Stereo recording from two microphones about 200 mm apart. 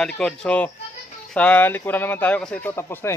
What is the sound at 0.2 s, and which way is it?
Speech, 5° left (ahead or behind).